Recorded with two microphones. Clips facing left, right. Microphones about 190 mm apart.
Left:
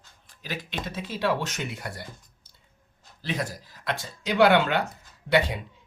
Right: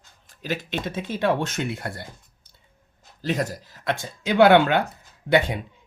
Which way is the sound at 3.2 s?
45° right (ahead or behind).